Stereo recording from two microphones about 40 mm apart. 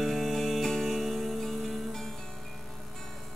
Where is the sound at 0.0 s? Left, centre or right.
Centre.